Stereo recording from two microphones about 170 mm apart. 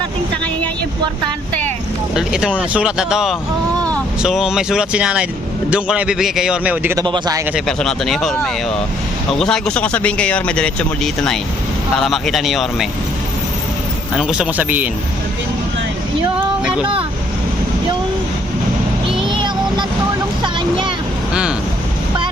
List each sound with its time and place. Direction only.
2.1 s a man's voice: 5° right (ahead or behind)
6.9 s speech: 25° right (ahead or behind)
7.5 s a man's voice: 5° left (ahead or behind)
9.4 s a man's voice: 5° left (ahead or behind)
14.2 s speech: 5° right (ahead or behind)
19.3 s vehicle: 30° right (ahead or behind)
20.4 s a sound: 30° right (ahead or behind)